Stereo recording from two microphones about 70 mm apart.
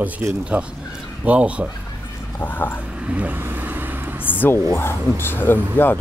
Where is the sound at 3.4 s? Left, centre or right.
Right.